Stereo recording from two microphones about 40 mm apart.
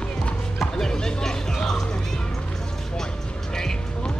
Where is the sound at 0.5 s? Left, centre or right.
Centre.